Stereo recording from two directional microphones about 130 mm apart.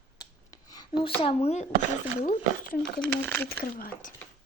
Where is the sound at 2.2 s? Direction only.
90° left.